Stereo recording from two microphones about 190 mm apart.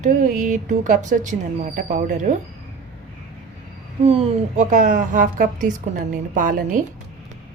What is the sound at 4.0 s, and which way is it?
A woman's voice, 30° right (ahead or behind).